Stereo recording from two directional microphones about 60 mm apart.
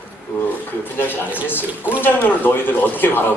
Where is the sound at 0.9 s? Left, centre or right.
Left.